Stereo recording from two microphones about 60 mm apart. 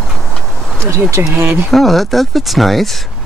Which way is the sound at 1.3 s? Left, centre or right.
Right.